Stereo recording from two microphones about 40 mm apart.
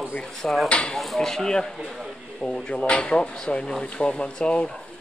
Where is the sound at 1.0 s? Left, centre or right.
Centre.